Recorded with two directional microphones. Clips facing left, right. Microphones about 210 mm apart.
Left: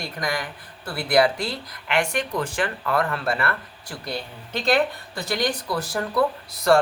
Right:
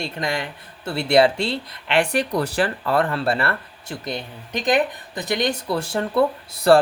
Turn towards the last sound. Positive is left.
turn(degrees=-30)  # may be behind; listen again after turning